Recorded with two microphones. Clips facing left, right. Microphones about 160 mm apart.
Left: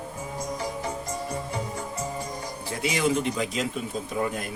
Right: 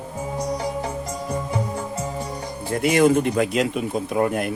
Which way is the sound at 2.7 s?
55° right (ahead or behind).